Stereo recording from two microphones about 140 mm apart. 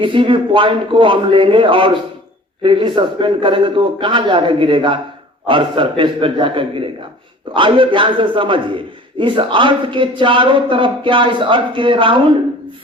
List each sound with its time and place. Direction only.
0.0 s a man's voice: 35° right (ahead or behind)